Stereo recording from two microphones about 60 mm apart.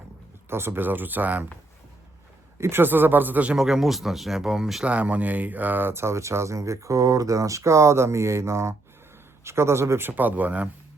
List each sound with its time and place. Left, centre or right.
0.5 s speech: right
2.6 s speech: right
3.5 s speech: centre
4.9 s speech: right
10.1 s speech: right